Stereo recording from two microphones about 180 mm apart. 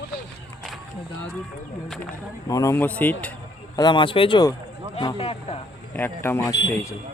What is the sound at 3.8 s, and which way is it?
Speech, 25° left (ahead or behind).